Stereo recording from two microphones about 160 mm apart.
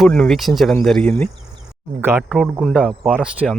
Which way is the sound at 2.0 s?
15° right (ahead or behind).